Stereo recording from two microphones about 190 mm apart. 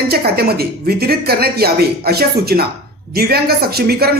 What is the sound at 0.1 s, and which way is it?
Speech, 55° right (ahead or behind).